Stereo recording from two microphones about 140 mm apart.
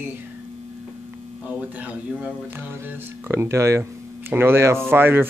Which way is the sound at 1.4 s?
10° right (ahead or behind).